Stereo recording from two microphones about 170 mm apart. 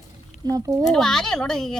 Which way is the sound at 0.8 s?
Centre (ahead or behind).